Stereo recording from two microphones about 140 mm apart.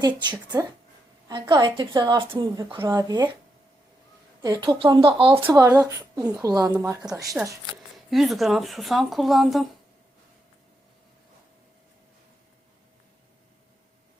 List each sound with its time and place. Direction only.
0.0 s a woman's voice: 30° right (ahead or behind)
2.8 s a woman's voice: 25° right (ahead or behind)
4.4 s a woman's voice: 30° right (ahead or behind)
5.5 s a woman's voice: 25° right (ahead or behind)
7.4 s speech: 10° right (ahead or behind)